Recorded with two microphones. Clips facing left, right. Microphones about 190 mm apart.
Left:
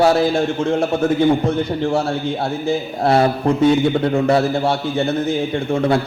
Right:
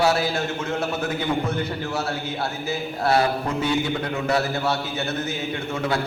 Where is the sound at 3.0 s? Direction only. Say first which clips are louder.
Left 6 dB; 30° left (ahead or behind).